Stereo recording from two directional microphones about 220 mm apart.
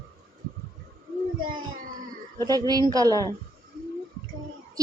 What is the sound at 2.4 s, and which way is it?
Speech, 15° right (ahead or behind).